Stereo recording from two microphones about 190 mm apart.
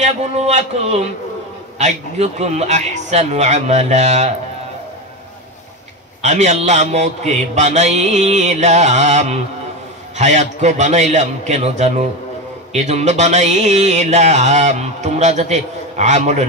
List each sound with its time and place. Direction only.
0.0 s speech: 35° right (ahead or behind)
6.2 s speech: 35° right (ahead or behind)